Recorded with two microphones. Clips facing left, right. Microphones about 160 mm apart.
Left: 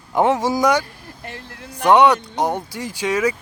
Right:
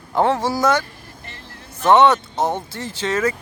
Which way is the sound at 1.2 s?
55° left (ahead or behind).